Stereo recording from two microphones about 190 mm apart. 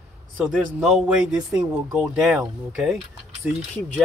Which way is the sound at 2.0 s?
5° right (ahead or behind).